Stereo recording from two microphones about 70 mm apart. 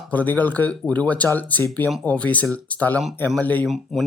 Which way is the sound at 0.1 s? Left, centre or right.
Left.